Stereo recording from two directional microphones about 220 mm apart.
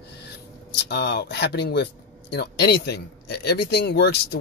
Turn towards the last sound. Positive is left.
turn(degrees=50)  # may be behind; listen again after turning